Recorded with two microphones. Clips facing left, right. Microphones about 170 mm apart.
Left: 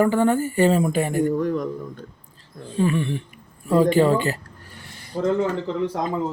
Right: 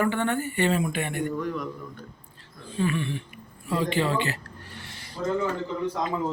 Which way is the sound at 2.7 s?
35° left (ahead or behind).